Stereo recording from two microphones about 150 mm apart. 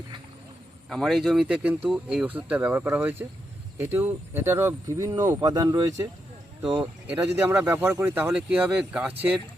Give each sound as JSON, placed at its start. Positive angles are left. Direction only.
{"t": 0.9, "sound": "speech", "side_deg": 0}
{"t": 7.1, "sound": "speech", "side_deg": -10}